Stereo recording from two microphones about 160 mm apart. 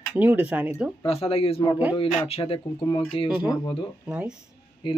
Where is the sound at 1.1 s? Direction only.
35° left (ahead or behind).